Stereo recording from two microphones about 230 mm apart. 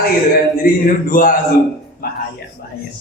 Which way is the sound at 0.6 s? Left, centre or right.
Left.